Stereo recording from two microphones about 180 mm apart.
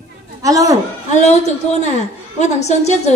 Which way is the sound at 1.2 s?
40° left (ahead or behind).